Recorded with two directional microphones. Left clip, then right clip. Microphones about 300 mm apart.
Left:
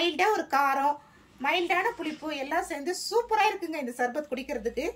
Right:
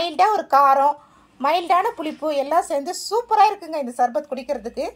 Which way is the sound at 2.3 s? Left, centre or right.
Centre.